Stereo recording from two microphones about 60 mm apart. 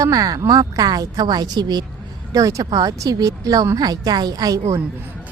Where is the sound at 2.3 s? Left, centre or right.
Right.